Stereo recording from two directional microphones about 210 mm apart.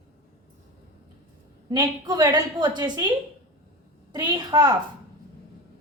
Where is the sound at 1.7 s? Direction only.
20° right (ahead or behind).